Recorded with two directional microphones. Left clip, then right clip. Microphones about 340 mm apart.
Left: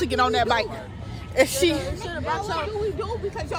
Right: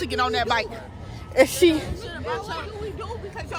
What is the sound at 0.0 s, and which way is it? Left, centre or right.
Speech, centre.